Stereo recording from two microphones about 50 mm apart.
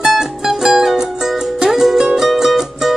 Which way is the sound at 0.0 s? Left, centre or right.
Centre.